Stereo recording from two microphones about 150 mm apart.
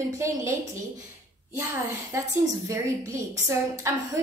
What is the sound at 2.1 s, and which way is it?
A woman's voice, 20° right (ahead or behind).